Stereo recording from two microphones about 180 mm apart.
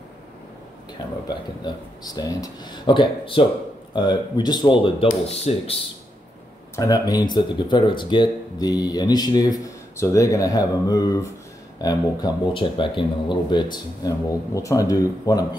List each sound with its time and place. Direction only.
1.2 s speech: 25° left (ahead or behind)
6.7 s speech: 20° left (ahead or behind)